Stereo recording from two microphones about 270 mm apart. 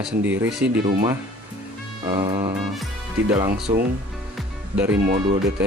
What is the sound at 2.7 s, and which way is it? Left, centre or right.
Speech, centre.